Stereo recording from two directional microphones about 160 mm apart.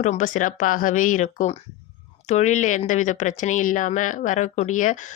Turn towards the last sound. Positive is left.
turn(degrees=55)  # may be behind; listen again after turning